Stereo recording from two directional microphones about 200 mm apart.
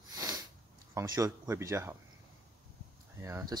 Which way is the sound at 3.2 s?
15° right (ahead or behind).